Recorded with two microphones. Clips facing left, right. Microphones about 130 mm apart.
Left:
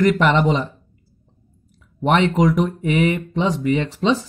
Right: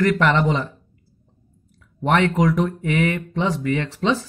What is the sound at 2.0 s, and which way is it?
Speech, 20° left (ahead or behind).